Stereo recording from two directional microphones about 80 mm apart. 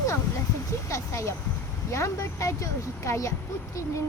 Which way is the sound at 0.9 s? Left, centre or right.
Left.